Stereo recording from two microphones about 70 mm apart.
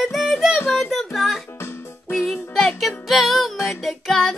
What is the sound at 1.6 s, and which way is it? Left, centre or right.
Music, left.